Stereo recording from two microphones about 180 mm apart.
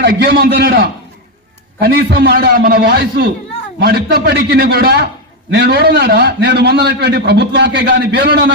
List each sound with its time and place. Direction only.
0.0 s a man's voice: 65° right (ahead or behind)